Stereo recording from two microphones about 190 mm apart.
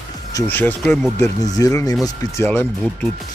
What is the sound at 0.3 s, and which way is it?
Speech, 15° left (ahead or behind).